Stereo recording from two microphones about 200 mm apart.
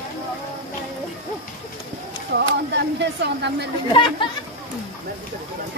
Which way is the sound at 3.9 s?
25° left (ahead or behind).